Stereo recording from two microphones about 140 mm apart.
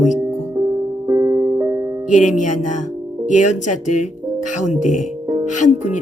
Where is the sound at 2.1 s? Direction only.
65° left (ahead or behind).